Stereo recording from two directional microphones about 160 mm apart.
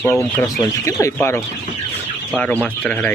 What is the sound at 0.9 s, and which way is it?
Speech, 20° left (ahead or behind).